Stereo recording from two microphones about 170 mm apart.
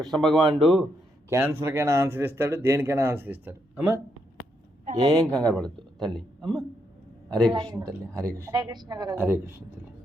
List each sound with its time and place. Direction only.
0.0 s speech: centre (ahead or behind)
1.3 s speech: 15° right (ahead or behind)
4.9 s a woman's voice: 25° right (ahead or behind)
5.2 s speech: 5° left (ahead or behind)
7.5 s a woman's voice: 25° right (ahead or behind)
9.1 s speech: 10° right (ahead or behind)